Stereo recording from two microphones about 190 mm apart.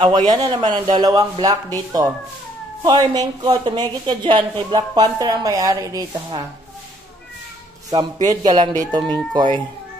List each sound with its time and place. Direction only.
0.3 s a woman's voice: 25° right (ahead or behind)
7.9 s a woman's voice: 20° right (ahead or behind)